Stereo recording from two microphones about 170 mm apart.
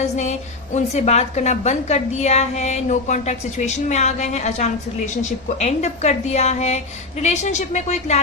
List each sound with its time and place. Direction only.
0.0 s a woman's voice: 45° left (ahead or behind)